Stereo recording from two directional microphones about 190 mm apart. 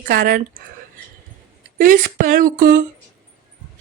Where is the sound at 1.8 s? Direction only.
45° right (ahead or behind).